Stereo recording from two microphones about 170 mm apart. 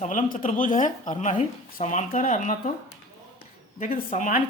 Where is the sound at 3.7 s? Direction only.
50° left (ahead or behind).